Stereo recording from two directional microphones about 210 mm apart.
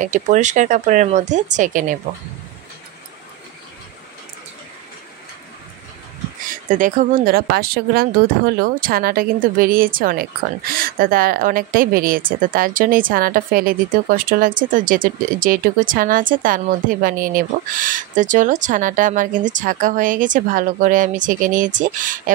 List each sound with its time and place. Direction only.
0.0 s a woman's voice: 35° right (ahead or behind)
6.5 s a woman's voice: 40° right (ahead or behind)